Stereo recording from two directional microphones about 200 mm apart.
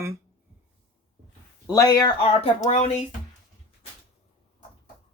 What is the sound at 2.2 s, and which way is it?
Speech, 30° left (ahead or behind).